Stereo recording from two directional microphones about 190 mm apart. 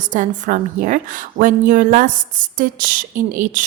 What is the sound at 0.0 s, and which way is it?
A woman's voice, 40° right (ahead or behind).